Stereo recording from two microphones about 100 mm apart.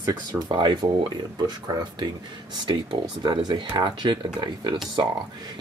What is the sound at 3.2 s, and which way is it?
Speech, 45° right (ahead or behind).